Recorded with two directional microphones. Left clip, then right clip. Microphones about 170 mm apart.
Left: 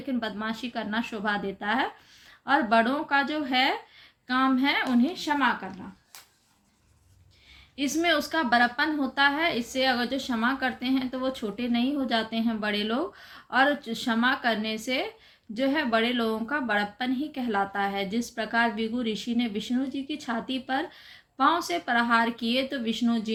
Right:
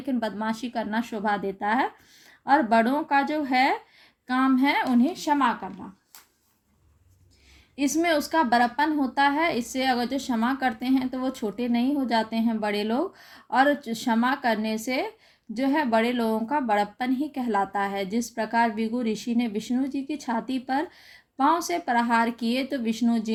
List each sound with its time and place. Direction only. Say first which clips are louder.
0.1 s speech: right 3 dB; 40° right (ahead or behind)
7.8 s speech: right 1 dB; 35° right (ahead or behind)